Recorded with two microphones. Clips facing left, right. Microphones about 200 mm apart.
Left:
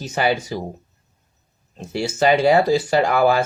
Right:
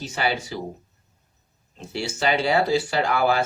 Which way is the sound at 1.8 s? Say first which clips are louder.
Left 6 dB; 45° left (ahead or behind).